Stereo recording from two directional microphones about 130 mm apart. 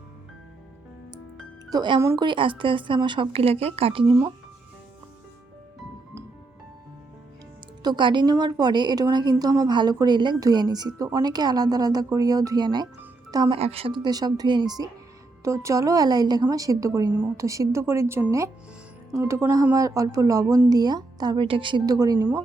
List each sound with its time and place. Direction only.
1.7 s a woman's voice: 35° right (ahead or behind)
7.8 s a woman's voice: 35° right (ahead or behind)
13.5 s a woman's voice: 50° right (ahead or behind); by 22.2 s 30° right (ahead or behind)
22.2 s speech: 15° right (ahead or behind)